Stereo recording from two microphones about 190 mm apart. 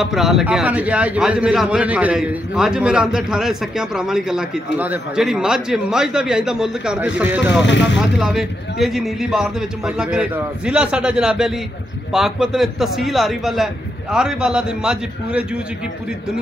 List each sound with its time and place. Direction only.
0.0 s a man's voice: centre (ahead or behind)
7.6 s speech: 70° left (ahead or behind)
8.2 s a man's voice: centre (ahead or behind)